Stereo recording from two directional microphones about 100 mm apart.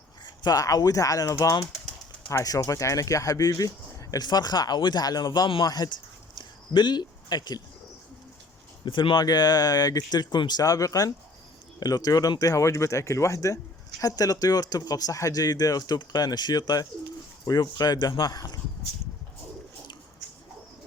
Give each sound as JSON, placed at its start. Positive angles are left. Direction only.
{"t": 0.3, "sound": "speech", "side_deg": 40}
{"t": 6.4, "sound": "a sound", "side_deg": 50}
{"t": 8.8, "sound": "speech", "side_deg": 55}
{"t": 9.2, "sound": "speech", "side_deg": 40}